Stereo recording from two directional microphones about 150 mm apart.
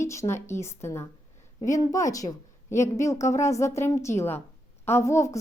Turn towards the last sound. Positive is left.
turn(degrees=20)  # may be behind; listen again after turning